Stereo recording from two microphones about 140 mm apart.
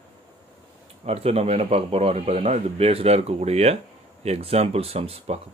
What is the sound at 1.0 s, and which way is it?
Speech, 45° right (ahead or behind).